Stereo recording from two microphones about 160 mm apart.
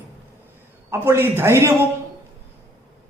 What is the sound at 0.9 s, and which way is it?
Speech, 15° right (ahead or behind).